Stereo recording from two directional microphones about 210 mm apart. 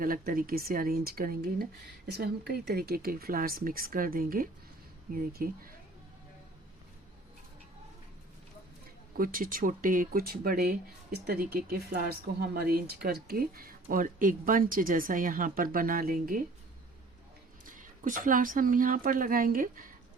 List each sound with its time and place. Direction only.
0.0 s speech: 40° right (ahead or behind)
9.1 s speech: 40° right (ahead or behind)
17.7 s speech: 40° right (ahead or behind)